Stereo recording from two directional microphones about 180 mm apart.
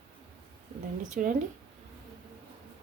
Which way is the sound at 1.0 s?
45° right (ahead or behind).